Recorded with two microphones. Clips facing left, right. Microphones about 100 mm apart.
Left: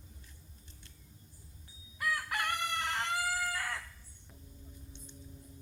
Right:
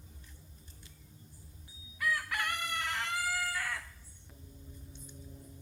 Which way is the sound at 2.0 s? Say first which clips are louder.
Even; 25° left (ahead or behind).